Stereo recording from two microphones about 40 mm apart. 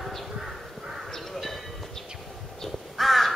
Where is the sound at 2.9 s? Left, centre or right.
Centre.